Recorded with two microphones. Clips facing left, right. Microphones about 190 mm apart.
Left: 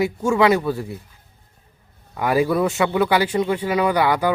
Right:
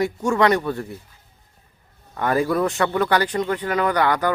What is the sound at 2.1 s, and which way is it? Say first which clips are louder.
A man's voice: left 2 dB; 10° left (ahead or behind).